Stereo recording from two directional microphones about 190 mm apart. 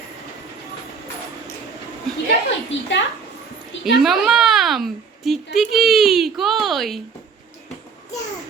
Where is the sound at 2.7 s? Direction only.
75° left (ahead or behind).